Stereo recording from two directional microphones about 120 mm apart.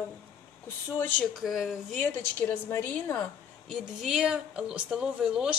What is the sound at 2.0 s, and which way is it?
A woman's voice, 15° left (ahead or behind).